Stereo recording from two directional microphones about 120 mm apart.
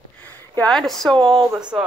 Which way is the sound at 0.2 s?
15° left (ahead or behind).